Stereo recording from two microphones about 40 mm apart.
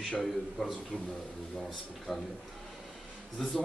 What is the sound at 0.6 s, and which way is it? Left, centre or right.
Speech, centre.